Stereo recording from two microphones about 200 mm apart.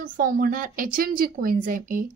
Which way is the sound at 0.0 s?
45° right (ahead or behind).